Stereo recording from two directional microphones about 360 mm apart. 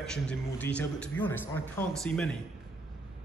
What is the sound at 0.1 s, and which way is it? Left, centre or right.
A man's voice, centre.